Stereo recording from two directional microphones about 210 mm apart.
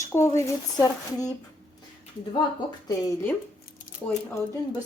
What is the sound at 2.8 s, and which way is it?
Speech, 10° left (ahead or behind).